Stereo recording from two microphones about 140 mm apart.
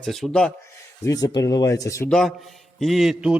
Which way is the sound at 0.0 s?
5° left (ahead or behind).